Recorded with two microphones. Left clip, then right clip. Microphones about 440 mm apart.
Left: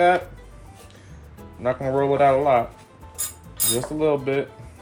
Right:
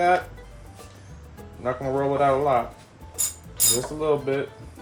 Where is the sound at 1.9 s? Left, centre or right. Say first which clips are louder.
Left 3 dB; left.